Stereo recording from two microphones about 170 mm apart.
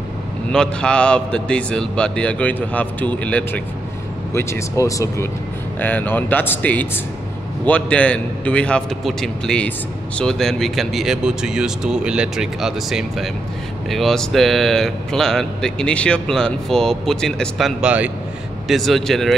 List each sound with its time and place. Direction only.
0.5 s a man's voice: 5° left (ahead or behind)